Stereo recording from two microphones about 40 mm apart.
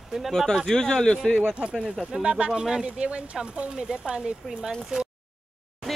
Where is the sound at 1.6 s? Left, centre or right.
Right.